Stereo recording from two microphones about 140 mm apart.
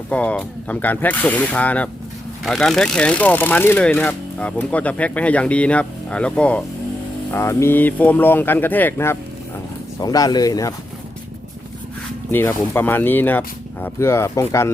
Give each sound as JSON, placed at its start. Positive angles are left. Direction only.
{"t": 0.1, "sound": "speech", "side_deg": 10}
{"t": 10.0, "sound": "speech", "side_deg": 30}
{"t": 12.3, "sound": "speech", "side_deg": 15}